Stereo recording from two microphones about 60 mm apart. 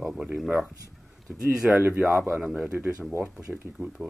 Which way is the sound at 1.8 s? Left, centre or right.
Right.